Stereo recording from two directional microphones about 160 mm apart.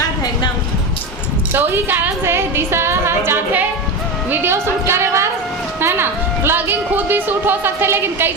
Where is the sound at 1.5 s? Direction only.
10° right (ahead or behind).